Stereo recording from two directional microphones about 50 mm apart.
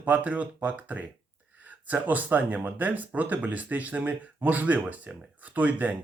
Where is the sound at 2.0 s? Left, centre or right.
Right.